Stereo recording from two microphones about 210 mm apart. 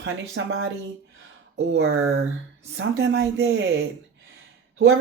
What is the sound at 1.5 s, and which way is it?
Speech, 60° right (ahead or behind).